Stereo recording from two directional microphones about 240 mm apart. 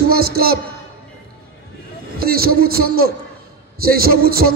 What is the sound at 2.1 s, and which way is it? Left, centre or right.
A man's voice, right.